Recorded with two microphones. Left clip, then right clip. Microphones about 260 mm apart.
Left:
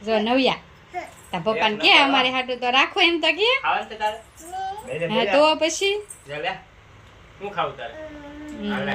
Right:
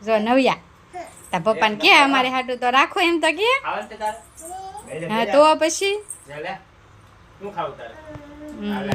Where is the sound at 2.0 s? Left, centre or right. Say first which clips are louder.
Right 1 dB; right.